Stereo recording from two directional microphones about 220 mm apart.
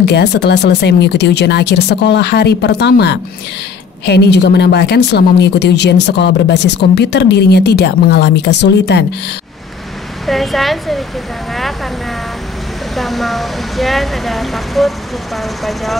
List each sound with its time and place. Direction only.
0.0 s a woman's voice: 50° left (ahead or behind)
10.2 s speech: centre (ahead or behind)
12.9 s speech: centre (ahead or behind)